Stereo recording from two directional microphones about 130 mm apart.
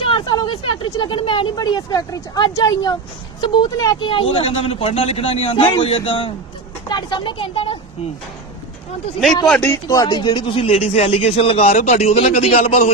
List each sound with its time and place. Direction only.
0.0 s speech: 40° left (ahead or behind)
4.1 s speech: 45° left (ahead or behind)
6.8 s speech: 35° left (ahead or behind)
9.6 s speech: 25° left (ahead or behind); by 12.8 s 55° left (ahead or behind)